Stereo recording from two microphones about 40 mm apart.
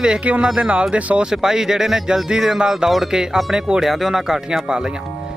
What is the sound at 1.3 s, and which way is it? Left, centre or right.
A man's voice, centre.